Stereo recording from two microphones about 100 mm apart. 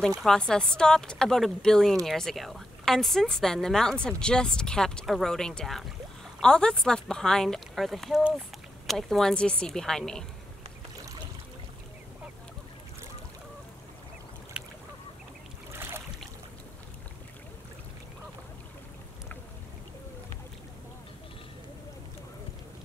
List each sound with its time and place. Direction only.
0.2 s speech: 5° left (ahead or behind)
15.7 s boat: 25° right (ahead or behind)